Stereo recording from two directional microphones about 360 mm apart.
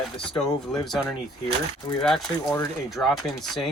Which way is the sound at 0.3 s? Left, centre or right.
Centre.